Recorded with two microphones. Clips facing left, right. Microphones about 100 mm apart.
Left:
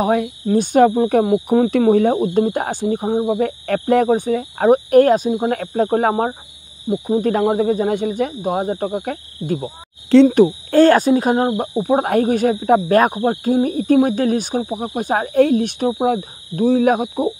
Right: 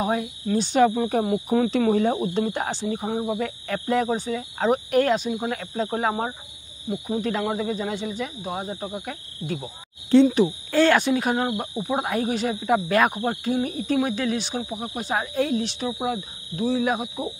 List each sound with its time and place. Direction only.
0.0 s speech: 55° left (ahead or behind)